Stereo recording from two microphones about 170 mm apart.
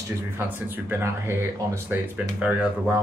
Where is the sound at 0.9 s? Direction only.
15° right (ahead or behind).